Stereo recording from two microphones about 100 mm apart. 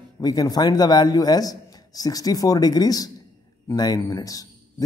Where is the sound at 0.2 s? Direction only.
40° left (ahead or behind).